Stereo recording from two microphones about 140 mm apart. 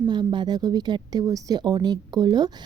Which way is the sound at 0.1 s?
30° right (ahead or behind).